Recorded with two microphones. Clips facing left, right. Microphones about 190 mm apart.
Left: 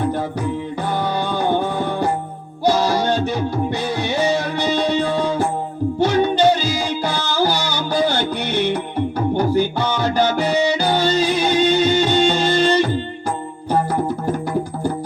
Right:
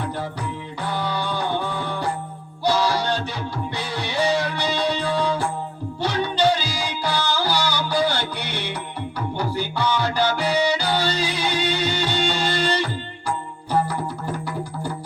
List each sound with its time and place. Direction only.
0.0 s music: 50° left (ahead or behind)
7.9 s music: 20° left (ahead or behind)
8.2 s music: 50° left (ahead or behind)